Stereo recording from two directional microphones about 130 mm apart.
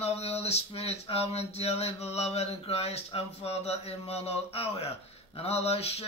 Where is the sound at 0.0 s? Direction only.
55° left (ahead or behind).